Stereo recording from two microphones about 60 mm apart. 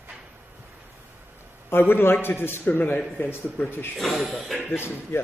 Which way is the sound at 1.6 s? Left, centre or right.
Left.